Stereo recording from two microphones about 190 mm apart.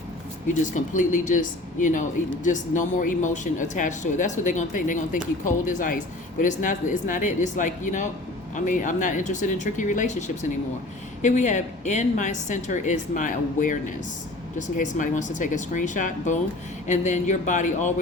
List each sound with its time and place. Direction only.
0.4 s speech: 40° left (ahead or behind)